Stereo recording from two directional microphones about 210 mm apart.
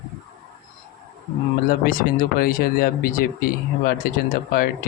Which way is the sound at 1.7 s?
40° left (ahead or behind).